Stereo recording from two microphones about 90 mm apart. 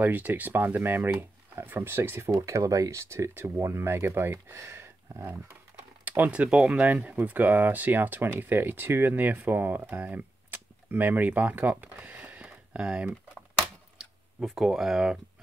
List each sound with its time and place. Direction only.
0.0 s speech: 20° right (ahead or behind)